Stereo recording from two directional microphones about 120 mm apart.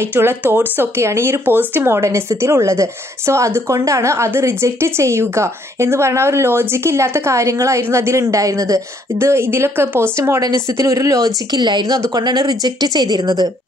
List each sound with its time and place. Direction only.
0.0 s speech: 20° right (ahead or behind)